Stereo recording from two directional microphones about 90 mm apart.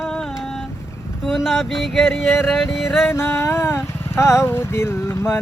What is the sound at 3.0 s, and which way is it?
Vehicle, 25° left (ahead or behind).